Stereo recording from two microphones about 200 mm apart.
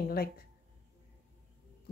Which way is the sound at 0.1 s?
50° left (ahead or behind).